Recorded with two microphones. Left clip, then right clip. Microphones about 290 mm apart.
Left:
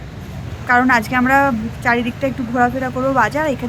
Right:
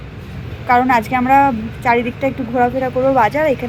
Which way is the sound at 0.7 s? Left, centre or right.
Centre.